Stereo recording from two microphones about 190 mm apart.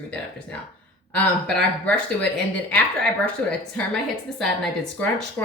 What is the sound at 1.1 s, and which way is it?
A woman's voice, 5° left (ahead or behind).